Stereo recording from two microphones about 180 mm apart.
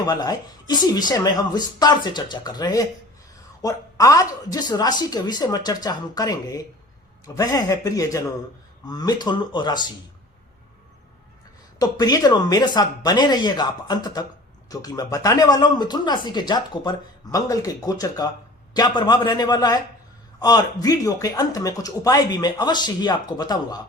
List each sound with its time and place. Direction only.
0.0 s speech: 20° left (ahead or behind)
11.8 s speech: 20° left (ahead or behind)